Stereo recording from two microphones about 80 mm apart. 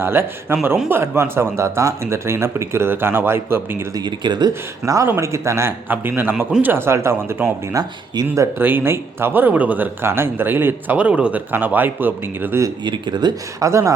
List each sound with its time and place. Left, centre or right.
0.0 s speech: right
3.9 s speech: right
5.2 s speech: right
5.9 s speech: right
7.7 s speech: right
8.5 s speech: right
10.9 s speech: centre
12.8 s speech: right
13.6 s speech: right